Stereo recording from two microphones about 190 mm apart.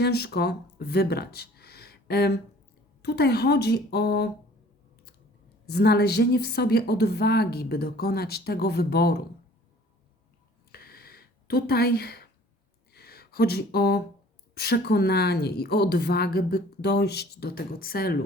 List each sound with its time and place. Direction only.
0.0 s a woman's voice: 55° left (ahead or behind)
5.6 s a woman's voice: 55° left (ahead or behind)
10.7 s a sound: 55° left (ahead or behind)
14.5 s a woman's voice: 55° left (ahead or behind)